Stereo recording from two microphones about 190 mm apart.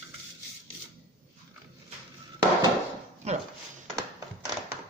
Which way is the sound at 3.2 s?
35° right (ahead or behind).